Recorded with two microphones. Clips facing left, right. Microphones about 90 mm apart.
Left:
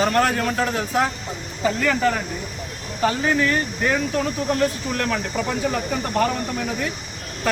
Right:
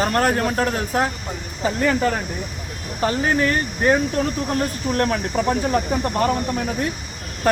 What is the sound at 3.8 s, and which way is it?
Speech, 40° right (ahead or behind).